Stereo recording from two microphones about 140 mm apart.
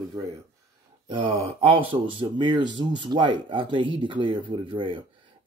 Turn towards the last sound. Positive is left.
turn(degrees=-35)  # may be behind; listen again after turning